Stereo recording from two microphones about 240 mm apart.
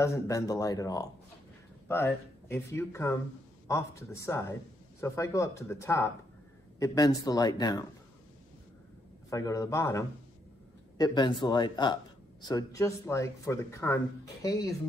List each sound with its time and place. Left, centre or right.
0.0 s speech: centre
9.3 s speech: centre